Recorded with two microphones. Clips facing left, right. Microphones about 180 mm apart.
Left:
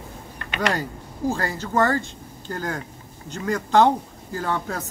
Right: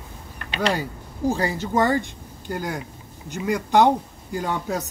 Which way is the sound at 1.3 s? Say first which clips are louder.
Right 1 dB; 15° right (ahead or behind).